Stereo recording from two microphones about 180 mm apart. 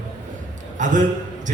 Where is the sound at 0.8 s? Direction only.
45° right (ahead or behind).